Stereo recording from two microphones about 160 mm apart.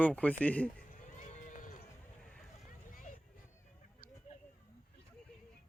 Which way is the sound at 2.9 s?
55° left (ahead or behind).